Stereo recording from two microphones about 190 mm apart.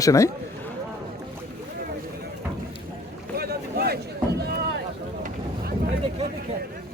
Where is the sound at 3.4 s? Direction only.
55° right (ahead or behind).